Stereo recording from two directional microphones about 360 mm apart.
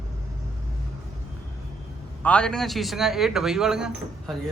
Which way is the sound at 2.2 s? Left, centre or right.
Centre.